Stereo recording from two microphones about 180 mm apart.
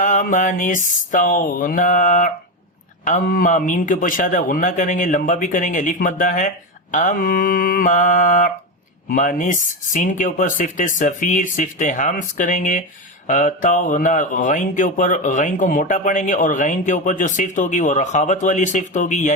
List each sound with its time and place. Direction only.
0.0 s speech: 45° left (ahead or behind)